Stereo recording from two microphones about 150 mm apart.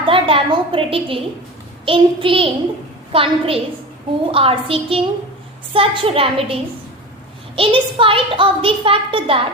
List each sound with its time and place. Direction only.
0.0 s a woman's voice: 35° right (ahead or behind)